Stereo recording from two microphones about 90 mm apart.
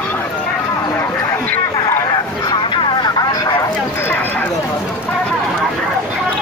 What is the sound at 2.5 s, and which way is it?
Vehicle, 50° left (ahead or behind).